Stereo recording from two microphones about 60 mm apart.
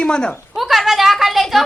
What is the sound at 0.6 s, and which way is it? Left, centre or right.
A child's voice, centre.